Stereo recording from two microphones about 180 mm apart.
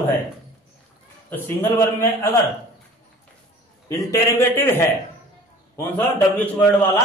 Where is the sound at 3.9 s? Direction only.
15° left (ahead or behind).